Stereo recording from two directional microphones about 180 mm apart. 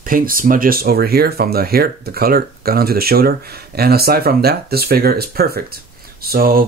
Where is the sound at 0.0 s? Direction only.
50° right (ahead or behind).